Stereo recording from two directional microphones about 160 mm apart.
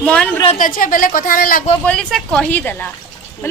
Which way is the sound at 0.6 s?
60° left (ahead or behind).